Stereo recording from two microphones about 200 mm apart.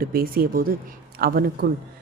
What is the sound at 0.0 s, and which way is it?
Speech, 50° right (ahead or behind).